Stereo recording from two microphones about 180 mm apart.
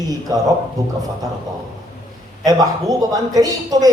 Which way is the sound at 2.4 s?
20° right (ahead or behind).